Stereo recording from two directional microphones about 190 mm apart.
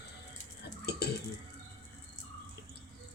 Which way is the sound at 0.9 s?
60° left (ahead or behind).